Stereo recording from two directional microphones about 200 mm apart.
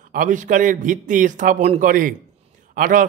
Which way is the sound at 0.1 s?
40° right (ahead or behind).